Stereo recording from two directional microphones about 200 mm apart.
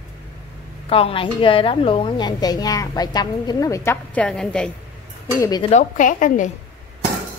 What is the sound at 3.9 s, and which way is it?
Speech, 5° left (ahead or behind).